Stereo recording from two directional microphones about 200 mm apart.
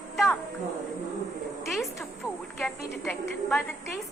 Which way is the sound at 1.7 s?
Centre (ahead or behind).